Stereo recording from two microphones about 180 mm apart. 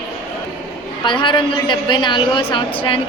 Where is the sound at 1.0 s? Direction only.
25° left (ahead or behind).